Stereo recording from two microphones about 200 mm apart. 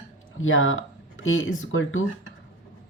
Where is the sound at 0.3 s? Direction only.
80° left.